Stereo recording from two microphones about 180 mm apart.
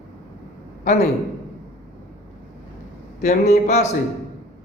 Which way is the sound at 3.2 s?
40° left (ahead or behind).